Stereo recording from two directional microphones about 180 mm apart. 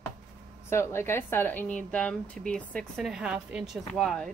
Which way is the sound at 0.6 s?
15° left (ahead or behind).